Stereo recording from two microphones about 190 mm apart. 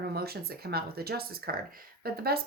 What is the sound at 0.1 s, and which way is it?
Speech, 55° right (ahead or behind).